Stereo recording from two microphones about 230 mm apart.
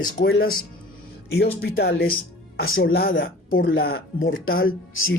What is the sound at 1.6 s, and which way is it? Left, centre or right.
Speech, left.